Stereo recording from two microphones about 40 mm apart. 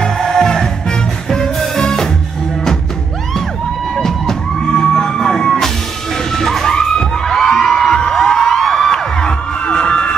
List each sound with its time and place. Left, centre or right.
0.0 s music: centre
4.0 s music: centre
6.3 s crowd: centre
8.6 s music: centre
8.9 s music: left